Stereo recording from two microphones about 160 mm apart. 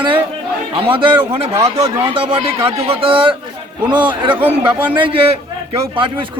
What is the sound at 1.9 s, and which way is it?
A man's voice, 35° right (ahead or behind).